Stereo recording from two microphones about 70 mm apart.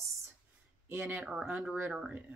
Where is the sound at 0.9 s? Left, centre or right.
Right.